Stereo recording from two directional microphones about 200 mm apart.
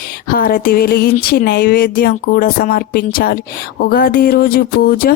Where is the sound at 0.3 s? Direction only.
45° left (ahead or behind).